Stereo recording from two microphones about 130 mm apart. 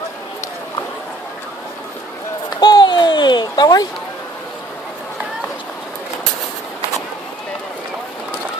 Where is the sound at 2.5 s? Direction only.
35° left (ahead or behind).